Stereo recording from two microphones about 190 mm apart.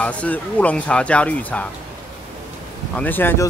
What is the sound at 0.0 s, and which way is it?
Speech, 5° left (ahead or behind).